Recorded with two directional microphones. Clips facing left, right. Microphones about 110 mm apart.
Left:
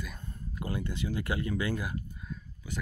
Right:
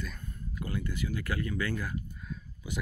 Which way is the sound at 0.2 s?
25° left (ahead or behind).